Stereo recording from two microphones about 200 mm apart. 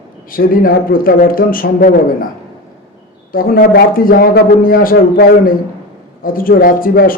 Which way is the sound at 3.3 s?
45° left (ahead or behind).